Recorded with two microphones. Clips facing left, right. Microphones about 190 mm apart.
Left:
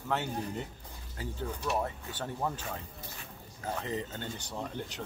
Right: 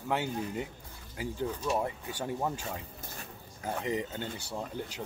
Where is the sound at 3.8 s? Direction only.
15° right (ahead or behind).